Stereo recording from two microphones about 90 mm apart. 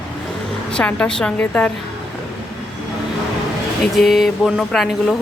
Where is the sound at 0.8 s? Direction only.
10° left (ahead or behind).